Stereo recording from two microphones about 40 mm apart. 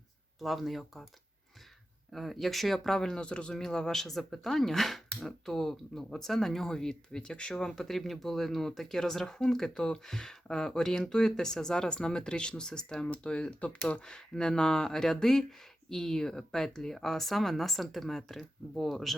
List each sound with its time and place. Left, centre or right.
0.3 s speech: centre
2.1 s speech: centre
3.2 s speech: left
3.5 s speech: centre